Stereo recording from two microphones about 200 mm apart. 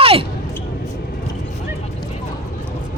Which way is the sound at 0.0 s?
30° right (ahead or behind).